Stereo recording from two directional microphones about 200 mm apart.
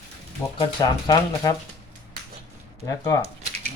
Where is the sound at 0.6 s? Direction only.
20° left (ahead or behind).